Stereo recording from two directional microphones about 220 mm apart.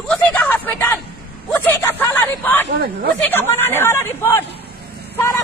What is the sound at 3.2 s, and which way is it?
Speech, 10° left (ahead or behind).